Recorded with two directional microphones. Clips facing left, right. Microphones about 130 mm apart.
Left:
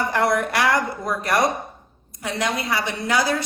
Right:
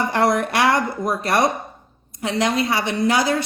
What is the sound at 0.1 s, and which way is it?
A woman's voice, 25° right (ahead or behind).